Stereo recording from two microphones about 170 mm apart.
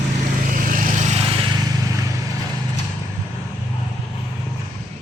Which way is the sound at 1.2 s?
30° right (ahead or behind).